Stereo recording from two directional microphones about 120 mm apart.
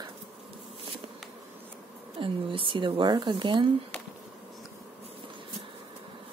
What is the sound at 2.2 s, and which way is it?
Speech, 45° right (ahead or behind).